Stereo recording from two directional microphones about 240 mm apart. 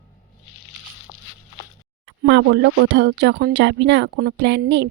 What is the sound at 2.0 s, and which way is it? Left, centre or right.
Speech, right.